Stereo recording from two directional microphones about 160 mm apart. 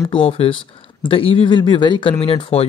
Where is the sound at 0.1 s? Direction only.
35° left (ahead or behind).